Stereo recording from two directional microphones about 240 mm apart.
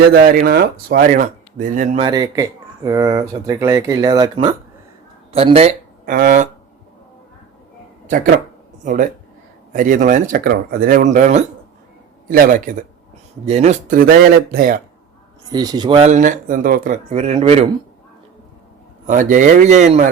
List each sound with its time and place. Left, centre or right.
0.1 s speech: right
2.0 s speech: centre
6.1 s speech: right
8.8 s speech: right
15.5 s speech: centre
19.0 s speech: right